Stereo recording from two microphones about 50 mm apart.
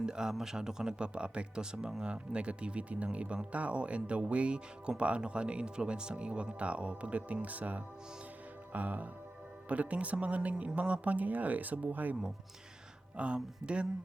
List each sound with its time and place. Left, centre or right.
0.0 s speech: centre
10.5 s speech: centre; by 12.1 s right
13.1 s speech: right